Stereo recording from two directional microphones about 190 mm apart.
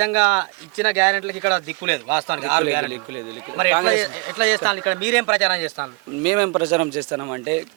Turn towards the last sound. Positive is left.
turn(degrees=-20)  # may be behind; listen again after turning